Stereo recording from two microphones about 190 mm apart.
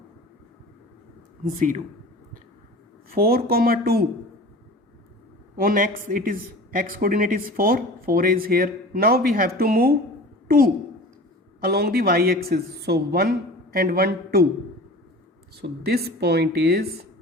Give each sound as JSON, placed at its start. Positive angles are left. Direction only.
{"t": 3.1, "sound": "speech", "side_deg": -50}
{"t": 5.5, "sound": "speech", "side_deg": -45}
{"t": 11.6, "sound": "a woman's voice", "side_deg": -55}
{"t": 15.5, "sound": "a woman's voice", "side_deg": -55}